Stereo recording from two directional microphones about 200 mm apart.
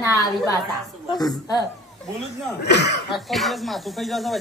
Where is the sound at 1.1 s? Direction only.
20° left (ahead or behind).